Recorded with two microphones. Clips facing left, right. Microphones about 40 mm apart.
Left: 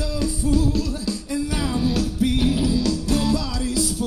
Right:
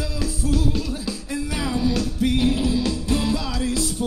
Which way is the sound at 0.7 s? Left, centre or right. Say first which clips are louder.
Left 2 dB; centre.